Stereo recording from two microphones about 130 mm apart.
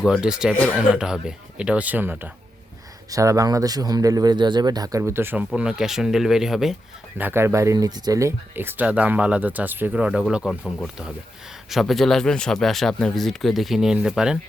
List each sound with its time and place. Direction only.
0.0 s speech: 5° right (ahead or behind)
3.1 s speech: 25° right (ahead or behind); by 6.7 s 5° right (ahead or behind)
7.2 s speech: 15° right (ahead or behind)
8.5 s speech: 15° right (ahead or behind)